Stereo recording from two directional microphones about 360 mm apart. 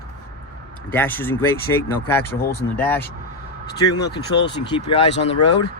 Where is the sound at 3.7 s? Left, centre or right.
Left.